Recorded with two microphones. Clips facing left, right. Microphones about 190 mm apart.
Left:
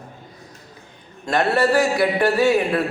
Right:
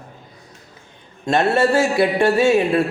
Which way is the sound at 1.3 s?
25° right (ahead or behind).